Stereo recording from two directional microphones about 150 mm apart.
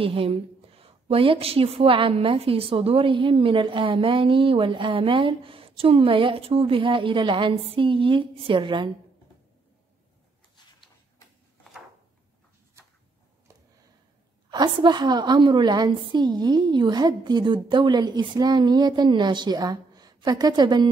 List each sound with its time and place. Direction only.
0.0 s a woman's voice: 40° right (ahead or behind)
14.5 s a woman's voice: 30° right (ahead or behind)